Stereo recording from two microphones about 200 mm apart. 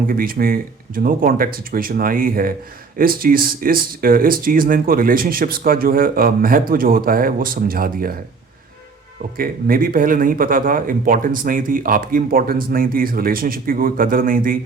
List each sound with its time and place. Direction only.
0.1 s speech: 45° right (ahead or behind)
9.4 s speech: 45° right (ahead or behind)